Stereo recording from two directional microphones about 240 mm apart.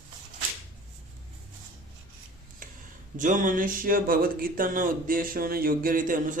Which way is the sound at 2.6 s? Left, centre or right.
Right.